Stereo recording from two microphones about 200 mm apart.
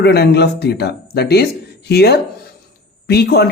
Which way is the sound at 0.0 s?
55° left (ahead or behind).